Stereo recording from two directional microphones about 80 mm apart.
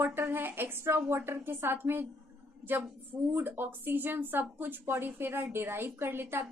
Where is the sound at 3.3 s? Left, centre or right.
Right.